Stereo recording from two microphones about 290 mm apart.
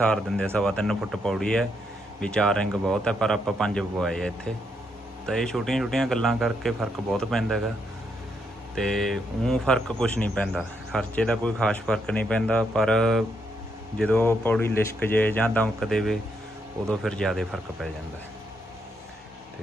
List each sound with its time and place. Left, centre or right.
0.1 s speech: centre
8.7 s speech: centre